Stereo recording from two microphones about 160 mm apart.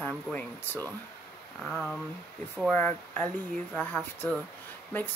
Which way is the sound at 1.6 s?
Centre (ahead or behind).